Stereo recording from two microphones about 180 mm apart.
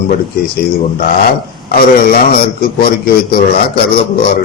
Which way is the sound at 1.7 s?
55° left (ahead or behind).